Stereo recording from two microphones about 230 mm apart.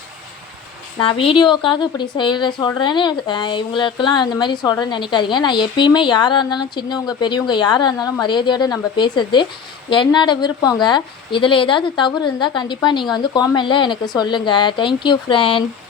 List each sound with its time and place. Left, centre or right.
0.9 s a woman's voice: left